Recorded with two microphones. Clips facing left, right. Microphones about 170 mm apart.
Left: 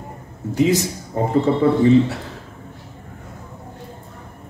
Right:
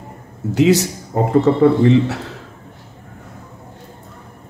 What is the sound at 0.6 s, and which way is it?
Speech, 75° right (ahead or behind).